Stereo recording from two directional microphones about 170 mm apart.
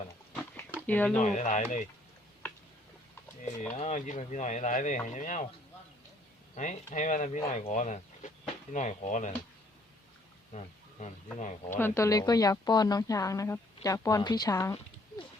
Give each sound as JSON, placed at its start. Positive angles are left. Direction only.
{"t": 0.9, "sound": "speech", "side_deg": 10}
{"t": 1.2, "sound": "speech", "side_deg": 45}
{"t": 3.4, "sound": "speech", "side_deg": 40}
{"t": 6.6, "sound": "speech", "side_deg": 45}
{"t": 10.5, "sound": "a sound", "side_deg": 45}
{"t": 11.3, "sound": "speech", "side_deg": 45}
{"t": 11.8, "sound": "a woman's voice", "side_deg": 15}